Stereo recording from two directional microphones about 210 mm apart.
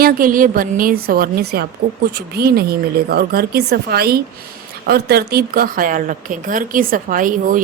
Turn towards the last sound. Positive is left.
turn(degrees=-40)  # may be behind; listen again after turning